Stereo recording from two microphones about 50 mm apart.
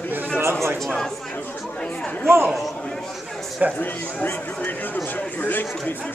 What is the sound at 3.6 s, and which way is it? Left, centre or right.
Speech, right.